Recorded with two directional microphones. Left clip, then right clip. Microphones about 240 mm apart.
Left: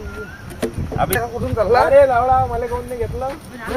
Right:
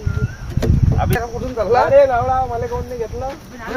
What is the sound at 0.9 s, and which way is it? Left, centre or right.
Speech, left.